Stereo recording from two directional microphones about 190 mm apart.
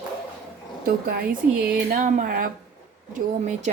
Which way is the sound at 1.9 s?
40° right (ahead or behind).